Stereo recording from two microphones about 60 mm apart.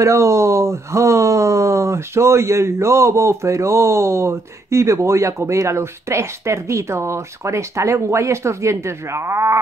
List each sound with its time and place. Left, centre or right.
0.0 s speech: right